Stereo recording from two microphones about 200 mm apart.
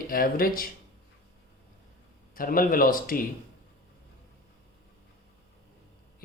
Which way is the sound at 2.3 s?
45° left (ahead or behind).